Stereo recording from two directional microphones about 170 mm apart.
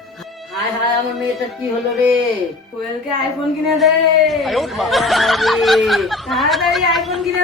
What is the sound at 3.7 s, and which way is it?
Speech, centre (ahead or behind).